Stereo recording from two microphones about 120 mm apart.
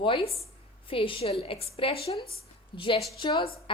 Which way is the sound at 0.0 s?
45° left (ahead or behind).